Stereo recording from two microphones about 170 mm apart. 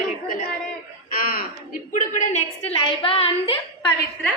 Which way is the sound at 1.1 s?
55° left (ahead or behind).